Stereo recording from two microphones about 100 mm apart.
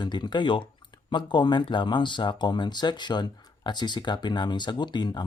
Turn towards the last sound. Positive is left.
turn(degrees=45)  # may be behind; listen again after turning